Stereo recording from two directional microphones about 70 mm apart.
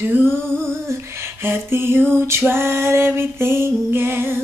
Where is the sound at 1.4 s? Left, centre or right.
Right.